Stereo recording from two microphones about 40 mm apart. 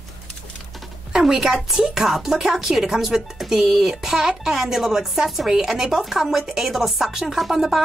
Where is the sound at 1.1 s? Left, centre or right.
Centre.